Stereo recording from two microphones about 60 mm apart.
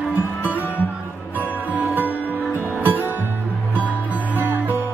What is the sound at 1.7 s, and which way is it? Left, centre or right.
Music, right.